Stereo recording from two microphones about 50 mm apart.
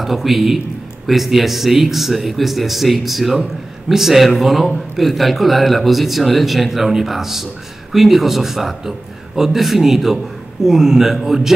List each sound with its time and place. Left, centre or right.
0.0 s a man's voice: centre